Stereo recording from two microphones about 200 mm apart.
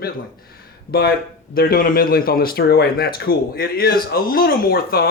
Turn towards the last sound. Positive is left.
turn(degrees=50)  # may be behind; listen again after turning